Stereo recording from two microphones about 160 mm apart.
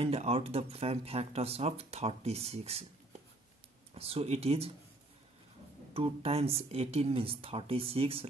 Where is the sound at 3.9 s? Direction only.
35° right (ahead or behind).